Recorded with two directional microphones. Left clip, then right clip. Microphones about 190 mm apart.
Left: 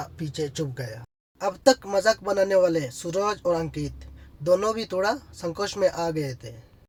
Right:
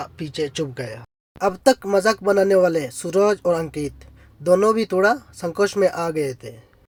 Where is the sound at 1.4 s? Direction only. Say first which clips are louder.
Right 3 dB; 30° right (ahead or behind).